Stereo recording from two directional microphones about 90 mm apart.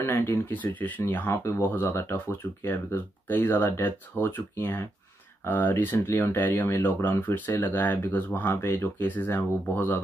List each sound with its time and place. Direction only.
0.0 s speech: 25° left (ahead or behind)